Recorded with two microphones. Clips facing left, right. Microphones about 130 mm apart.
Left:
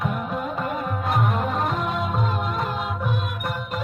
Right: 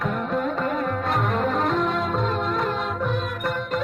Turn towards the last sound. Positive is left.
turn(degrees=10)  # may be behind; listen again after turning